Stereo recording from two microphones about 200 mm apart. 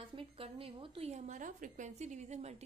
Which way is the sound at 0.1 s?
25° right (ahead or behind).